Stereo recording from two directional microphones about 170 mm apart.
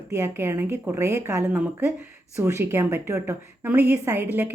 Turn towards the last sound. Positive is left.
turn(degrees=-10)  # may be behind; listen again after turning